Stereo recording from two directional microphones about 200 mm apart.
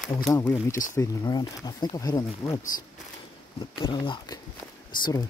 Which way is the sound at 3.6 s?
20° left (ahead or behind).